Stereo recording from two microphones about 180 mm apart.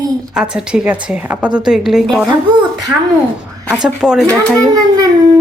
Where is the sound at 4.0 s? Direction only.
5° right (ahead or behind).